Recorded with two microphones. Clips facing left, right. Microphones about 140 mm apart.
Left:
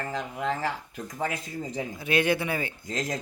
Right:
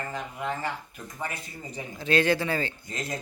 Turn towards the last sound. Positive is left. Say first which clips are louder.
# left 4 dB
turn(degrees=90)